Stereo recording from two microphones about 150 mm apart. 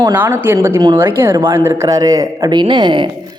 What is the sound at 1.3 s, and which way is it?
Speech, 30° right (ahead or behind).